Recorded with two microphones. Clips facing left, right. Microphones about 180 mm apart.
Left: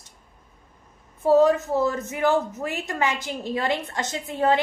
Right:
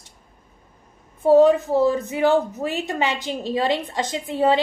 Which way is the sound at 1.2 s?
20° right (ahead or behind).